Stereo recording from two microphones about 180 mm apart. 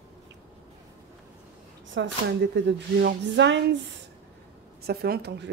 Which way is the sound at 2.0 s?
90° right.